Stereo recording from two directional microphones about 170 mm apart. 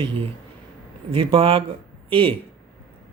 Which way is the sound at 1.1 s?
30° right (ahead or behind).